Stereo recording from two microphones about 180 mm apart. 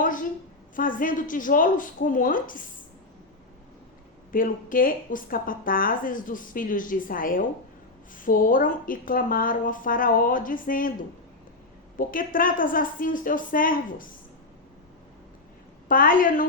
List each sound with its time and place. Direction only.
0.8 s a woman's voice: 50° left (ahead or behind)
4.3 s a woman's voice: 50° left (ahead or behind)
11.9 s a woman's voice: 50° left (ahead or behind)
15.9 s a woman's voice: 50° left (ahead or behind)